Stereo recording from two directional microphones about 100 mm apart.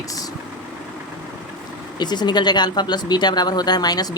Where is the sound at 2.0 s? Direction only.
45° left (ahead or behind).